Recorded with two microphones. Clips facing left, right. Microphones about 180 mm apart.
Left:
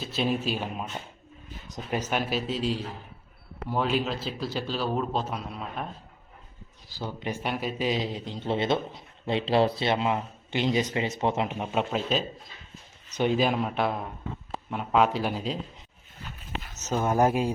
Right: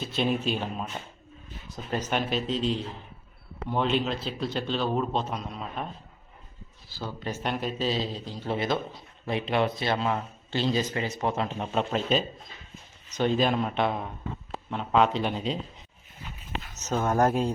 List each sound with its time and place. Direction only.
0.0 s a man's voice: centre (ahead or behind)
6.9 s a man's voice: 15° left (ahead or behind)
16.9 s speech: 5° left (ahead or behind)